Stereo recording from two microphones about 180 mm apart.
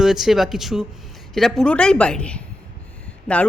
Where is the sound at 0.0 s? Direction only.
Centre (ahead or behind).